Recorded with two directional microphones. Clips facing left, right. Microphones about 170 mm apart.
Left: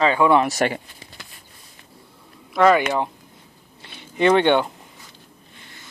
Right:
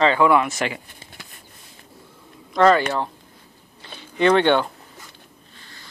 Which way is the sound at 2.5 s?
5° left (ahead or behind).